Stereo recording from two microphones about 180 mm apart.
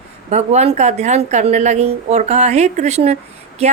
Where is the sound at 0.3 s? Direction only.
40° right (ahead or behind).